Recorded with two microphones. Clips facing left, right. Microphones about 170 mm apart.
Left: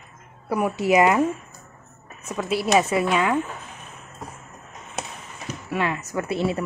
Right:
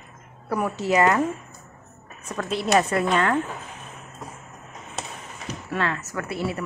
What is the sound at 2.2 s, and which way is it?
A woman's voice, 5° left (ahead or behind).